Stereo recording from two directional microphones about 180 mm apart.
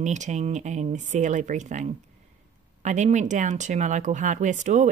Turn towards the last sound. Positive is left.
turn(degrees=-45)  # may be behind; listen again after turning